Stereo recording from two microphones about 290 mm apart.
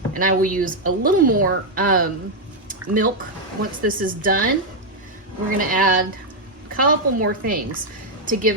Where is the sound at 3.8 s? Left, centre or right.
Right.